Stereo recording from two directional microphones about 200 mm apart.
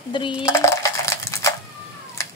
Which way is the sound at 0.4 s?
15° left (ahead or behind).